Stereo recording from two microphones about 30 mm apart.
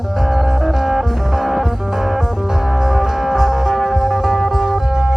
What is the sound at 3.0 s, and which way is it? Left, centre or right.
Music, centre.